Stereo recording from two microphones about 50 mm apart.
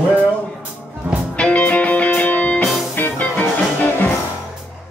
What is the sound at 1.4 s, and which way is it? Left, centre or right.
Music, left.